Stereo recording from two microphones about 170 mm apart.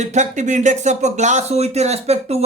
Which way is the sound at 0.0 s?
45° right (ahead or behind).